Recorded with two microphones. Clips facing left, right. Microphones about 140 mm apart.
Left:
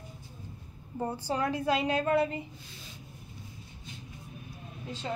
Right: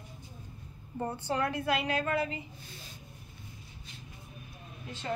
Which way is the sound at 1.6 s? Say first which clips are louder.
Left 3 dB; 30° left (ahead or behind).